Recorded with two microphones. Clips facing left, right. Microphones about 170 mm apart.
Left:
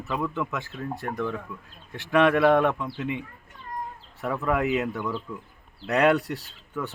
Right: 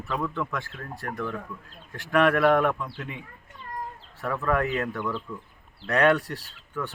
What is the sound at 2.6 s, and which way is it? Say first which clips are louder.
Speech: left 1 dB; 25° left (ahead or behind).